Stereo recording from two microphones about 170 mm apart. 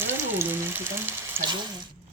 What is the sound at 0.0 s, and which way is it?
Speech, 15° right (ahead or behind).